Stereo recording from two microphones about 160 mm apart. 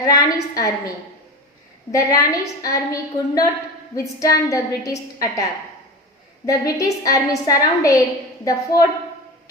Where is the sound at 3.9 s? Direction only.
20° left (ahead or behind).